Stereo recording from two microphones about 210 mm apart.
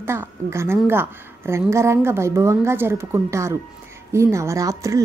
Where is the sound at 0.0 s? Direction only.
10° right (ahead or behind).